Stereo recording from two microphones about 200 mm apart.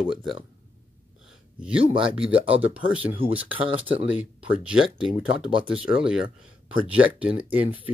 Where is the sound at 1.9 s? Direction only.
30° right (ahead or behind).